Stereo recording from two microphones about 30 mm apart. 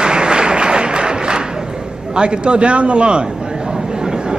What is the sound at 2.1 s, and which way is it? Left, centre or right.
A man's voice, right.